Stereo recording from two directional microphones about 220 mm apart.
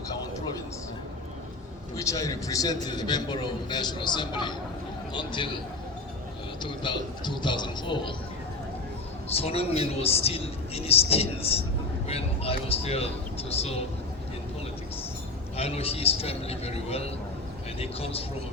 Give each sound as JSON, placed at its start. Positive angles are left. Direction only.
{"t": 2.0, "sound": "speech", "side_deg": 15}
{"t": 6.6, "sound": "speech", "side_deg": 20}
{"t": 9.3, "sound": "speech", "side_deg": 25}
{"t": 15.5, "sound": "speech", "side_deg": 25}